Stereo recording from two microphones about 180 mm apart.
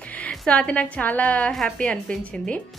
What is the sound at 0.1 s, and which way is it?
A woman's voice, 10° left (ahead or behind).